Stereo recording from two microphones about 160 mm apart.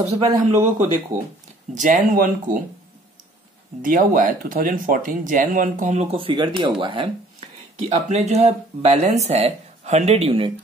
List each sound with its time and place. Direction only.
0.0 s speech: 40° right (ahead or behind); by 2.6 s 60° right (ahead or behind)
3.8 s speech: 60° right (ahead or behind)
6.1 s speech: 30° right (ahead or behind)
7.9 s speech: 45° right (ahead or behind)